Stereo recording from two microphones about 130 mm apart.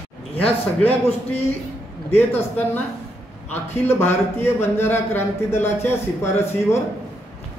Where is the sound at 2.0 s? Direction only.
15° left (ahead or behind).